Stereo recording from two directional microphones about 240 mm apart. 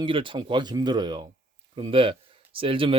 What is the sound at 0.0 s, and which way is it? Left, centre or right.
Speech, right.